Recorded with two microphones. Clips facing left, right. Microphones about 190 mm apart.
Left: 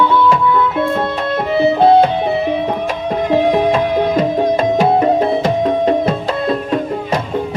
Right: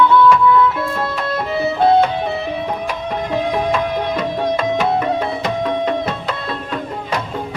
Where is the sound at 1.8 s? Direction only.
25° left (ahead or behind).